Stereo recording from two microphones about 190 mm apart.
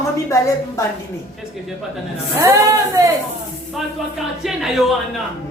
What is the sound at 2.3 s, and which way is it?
Speech, 15° right (ahead or behind).